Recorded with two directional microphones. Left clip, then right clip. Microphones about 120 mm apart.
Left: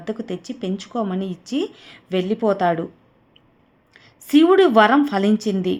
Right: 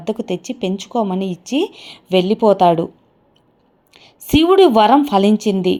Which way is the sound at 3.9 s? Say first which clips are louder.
Right 1 dB; 30° right (ahead or behind).